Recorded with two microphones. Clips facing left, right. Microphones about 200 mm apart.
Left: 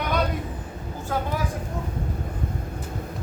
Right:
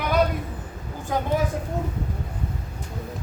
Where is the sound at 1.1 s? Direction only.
15° right (ahead or behind).